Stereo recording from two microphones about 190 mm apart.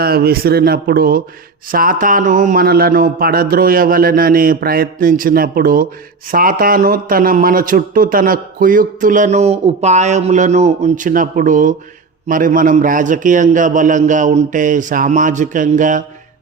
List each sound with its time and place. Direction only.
0.0 s speech: 55° right (ahead or behind)